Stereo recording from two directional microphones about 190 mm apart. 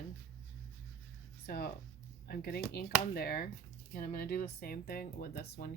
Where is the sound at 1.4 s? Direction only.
55° left (ahead or behind).